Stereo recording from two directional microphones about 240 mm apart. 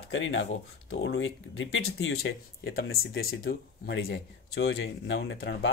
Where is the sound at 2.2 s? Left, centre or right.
Left.